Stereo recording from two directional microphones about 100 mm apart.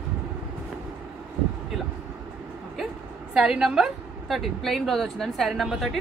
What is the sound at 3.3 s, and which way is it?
A woman's voice, 10° right (ahead or behind).